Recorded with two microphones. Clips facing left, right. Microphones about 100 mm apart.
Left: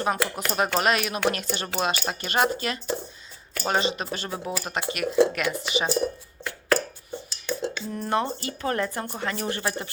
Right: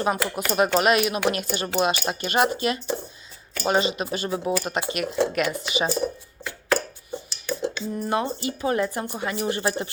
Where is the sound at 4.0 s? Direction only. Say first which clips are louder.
Right 4 dB; 15° right (ahead or behind).